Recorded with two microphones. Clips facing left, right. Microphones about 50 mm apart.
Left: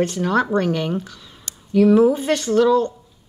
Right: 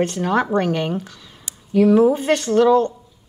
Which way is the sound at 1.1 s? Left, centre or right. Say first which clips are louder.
Even; centre.